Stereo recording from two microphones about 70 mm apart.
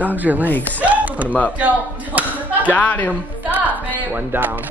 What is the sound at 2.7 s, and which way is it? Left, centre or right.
Speech, left.